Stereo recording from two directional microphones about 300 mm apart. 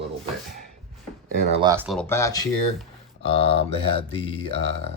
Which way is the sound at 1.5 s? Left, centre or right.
Centre.